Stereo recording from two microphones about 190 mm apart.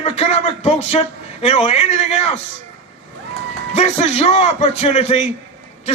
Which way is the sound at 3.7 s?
35° left (ahead or behind).